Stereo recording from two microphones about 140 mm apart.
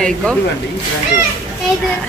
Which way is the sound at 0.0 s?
5° left (ahead or behind).